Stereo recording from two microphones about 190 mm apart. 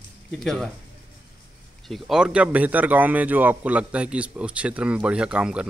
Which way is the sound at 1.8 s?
Centre (ahead or behind).